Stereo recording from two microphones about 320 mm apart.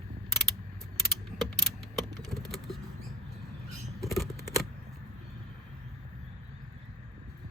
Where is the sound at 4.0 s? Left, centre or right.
Centre.